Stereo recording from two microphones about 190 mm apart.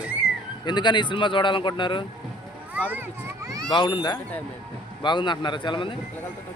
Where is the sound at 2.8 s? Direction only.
10° right (ahead or behind).